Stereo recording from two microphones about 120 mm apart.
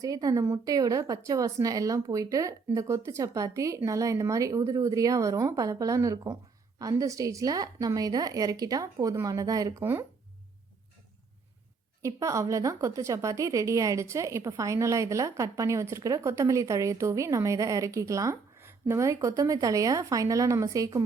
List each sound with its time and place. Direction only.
0.0 s a woman's voice: 30° right (ahead or behind)
9.8 s a woman's voice: 20° right (ahead or behind)
12.0 s a woman's voice: 25° right (ahead or behind)